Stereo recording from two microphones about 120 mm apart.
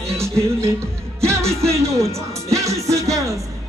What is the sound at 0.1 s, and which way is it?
Music, 25° right (ahead or behind).